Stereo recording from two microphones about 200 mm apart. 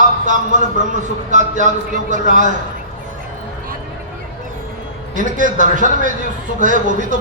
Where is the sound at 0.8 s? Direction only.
40° right (ahead or behind).